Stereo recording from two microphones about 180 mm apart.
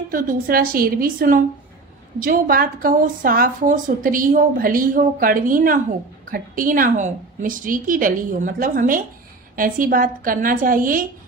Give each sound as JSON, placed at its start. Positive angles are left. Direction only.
{"t": 0.1, "sound": "speech", "side_deg": -50}